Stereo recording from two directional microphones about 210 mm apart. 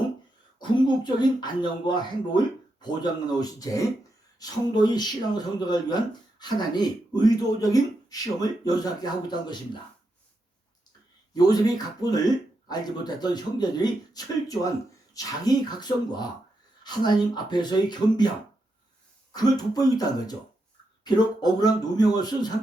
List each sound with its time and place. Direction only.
1.0 s speech: 20° left (ahead or behind)
11.3 s speech: 20° left (ahead or behind)
19.3 s speech: 20° left (ahead or behind)